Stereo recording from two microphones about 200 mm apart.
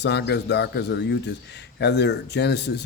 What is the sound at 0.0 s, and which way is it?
Speech, 55° left (ahead or behind).